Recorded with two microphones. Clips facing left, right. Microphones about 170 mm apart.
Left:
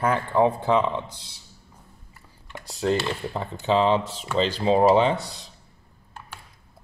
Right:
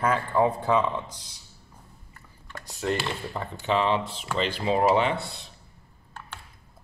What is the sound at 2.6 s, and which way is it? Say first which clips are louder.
Speech: left 5 dB; 35° left (ahead or behind).